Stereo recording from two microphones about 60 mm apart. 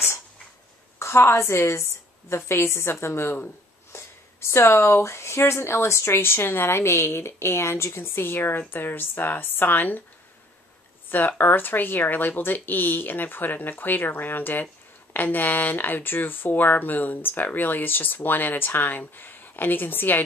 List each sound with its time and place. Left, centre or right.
0.9 s speech: left
11.1 s speech: left